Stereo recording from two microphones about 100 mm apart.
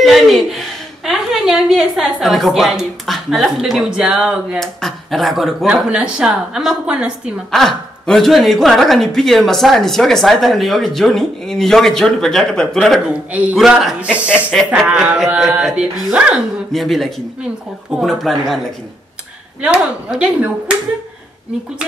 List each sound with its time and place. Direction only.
0.0 s a woman's voice: centre (ahead or behind)
7.5 s speech: 5° left (ahead or behind)
13.3 s speech: 15° right (ahead or behind)
13.6 s speech: centre (ahead or behind)
16.7 s speech: centre (ahead or behind)
19.6 s speech: 10° right (ahead or behind)